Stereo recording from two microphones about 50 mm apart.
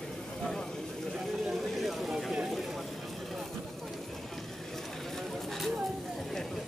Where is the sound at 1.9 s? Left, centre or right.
Centre.